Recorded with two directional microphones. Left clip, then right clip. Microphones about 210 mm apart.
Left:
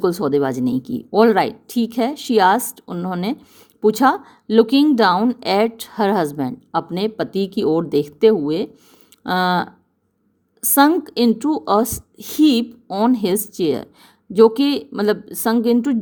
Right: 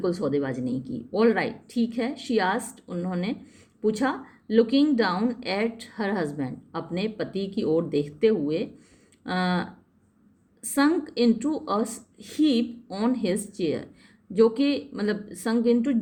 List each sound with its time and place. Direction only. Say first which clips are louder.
0.0 s speech: left 8 dB; 55° left (ahead or behind)